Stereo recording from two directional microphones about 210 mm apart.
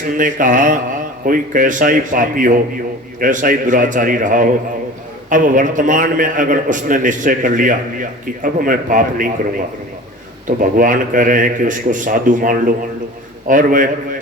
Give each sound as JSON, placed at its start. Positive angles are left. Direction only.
{"t": 0.2, "sound": "a man's voice", "side_deg": -40}
{"t": 10.4, "sound": "a man's voice", "side_deg": -40}